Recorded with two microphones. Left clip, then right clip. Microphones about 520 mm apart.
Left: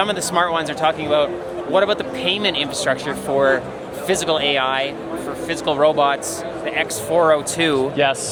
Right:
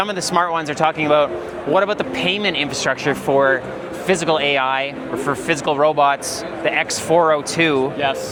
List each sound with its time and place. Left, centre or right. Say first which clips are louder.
0.0 s speech: even; right
5.5 s speech: left 1 dB; right
7.5 s speech: right 2 dB; centre
8.0 s speech: left 6 dB; left